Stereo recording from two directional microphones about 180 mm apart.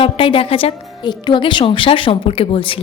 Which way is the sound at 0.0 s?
30° left (ahead or behind).